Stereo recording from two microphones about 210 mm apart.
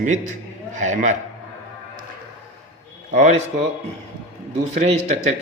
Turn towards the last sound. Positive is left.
turn(degrees=-30)  # may be behind; listen again after turning